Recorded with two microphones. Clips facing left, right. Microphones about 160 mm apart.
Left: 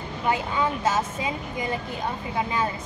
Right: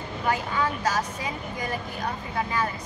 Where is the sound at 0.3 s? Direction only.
20° left (ahead or behind).